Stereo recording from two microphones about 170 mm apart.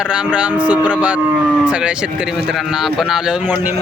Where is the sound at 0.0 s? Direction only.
5° right (ahead or behind).